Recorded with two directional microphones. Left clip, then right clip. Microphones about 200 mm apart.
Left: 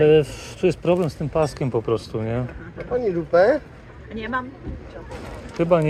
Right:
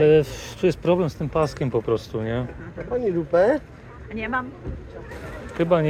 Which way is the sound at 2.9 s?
50° right (ahead or behind).